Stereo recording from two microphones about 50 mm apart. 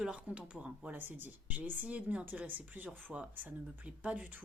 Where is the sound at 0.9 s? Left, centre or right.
Right.